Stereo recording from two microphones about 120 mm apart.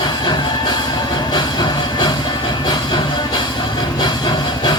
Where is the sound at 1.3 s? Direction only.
35° left (ahead or behind).